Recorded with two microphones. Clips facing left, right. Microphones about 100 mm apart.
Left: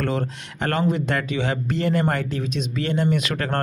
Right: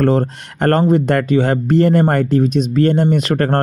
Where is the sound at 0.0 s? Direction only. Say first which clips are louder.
Right 10 dB; 40° right (ahead or behind).